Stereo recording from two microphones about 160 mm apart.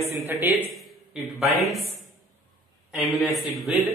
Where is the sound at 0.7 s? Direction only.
Centre (ahead or behind).